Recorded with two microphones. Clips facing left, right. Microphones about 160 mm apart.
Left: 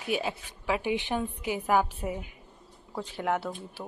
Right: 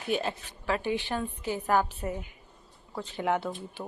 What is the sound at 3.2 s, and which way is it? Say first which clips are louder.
Speech: right 1 dB; centre (ahead or behind).